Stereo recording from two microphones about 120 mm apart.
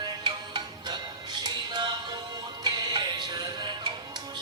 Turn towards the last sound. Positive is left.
turn(degrees=-35)  # may be behind; listen again after turning